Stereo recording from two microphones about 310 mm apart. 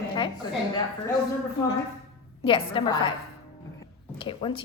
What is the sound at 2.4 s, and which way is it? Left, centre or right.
Speech, centre.